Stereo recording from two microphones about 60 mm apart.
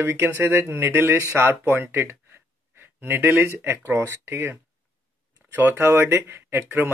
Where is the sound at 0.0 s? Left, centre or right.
Right.